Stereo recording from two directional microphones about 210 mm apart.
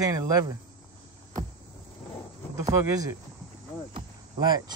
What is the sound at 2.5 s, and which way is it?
Speech, 15° right (ahead or behind).